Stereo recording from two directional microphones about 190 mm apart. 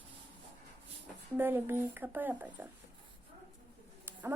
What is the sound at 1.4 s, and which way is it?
A child's voice, 10° right (ahead or behind).